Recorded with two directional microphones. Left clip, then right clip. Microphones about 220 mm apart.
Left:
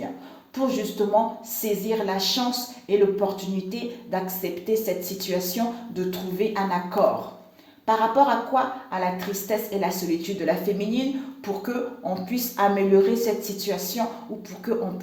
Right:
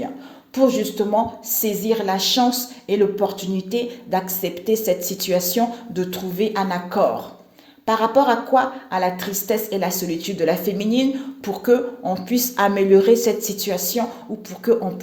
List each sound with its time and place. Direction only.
0.5 s a woman's voice: 50° right (ahead or behind)